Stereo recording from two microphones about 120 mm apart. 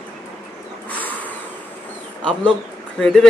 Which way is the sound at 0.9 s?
15° left (ahead or behind).